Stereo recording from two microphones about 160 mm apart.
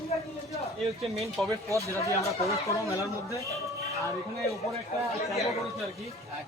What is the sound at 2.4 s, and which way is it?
Speech, 20° left (ahead or behind).